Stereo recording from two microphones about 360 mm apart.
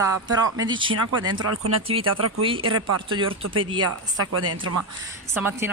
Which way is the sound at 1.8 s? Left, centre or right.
Centre.